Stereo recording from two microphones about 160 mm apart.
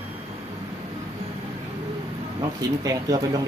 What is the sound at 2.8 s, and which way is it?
Speech, 25° right (ahead or behind).